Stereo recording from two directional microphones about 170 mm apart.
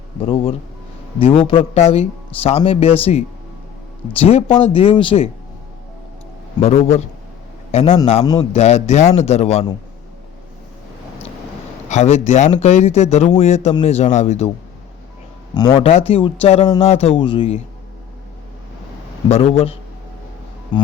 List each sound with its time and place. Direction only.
0.2 s speech: 30° left (ahead or behind)
6.6 s a man's voice: 40° left (ahead or behind)
7.9 s a man's voice: 30° left (ahead or behind)
8.5 s speech: 40° left (ahead or behind)
11.9 s speech: 40° left (ahead or behind)
15.5 s speech: 30° left (ahead or behind)
19.3 s speech: 35° left (ahead or behind)